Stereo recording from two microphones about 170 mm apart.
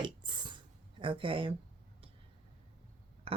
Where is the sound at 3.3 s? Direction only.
35° right (ahead or behind).